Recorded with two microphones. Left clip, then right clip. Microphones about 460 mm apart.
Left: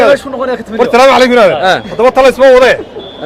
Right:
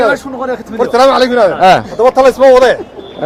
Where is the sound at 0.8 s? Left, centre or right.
Left.